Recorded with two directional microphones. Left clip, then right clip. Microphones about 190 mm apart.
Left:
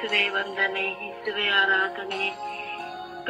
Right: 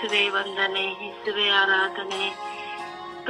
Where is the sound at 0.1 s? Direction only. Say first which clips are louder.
Right 1 dB; 30° right (ahead or behind).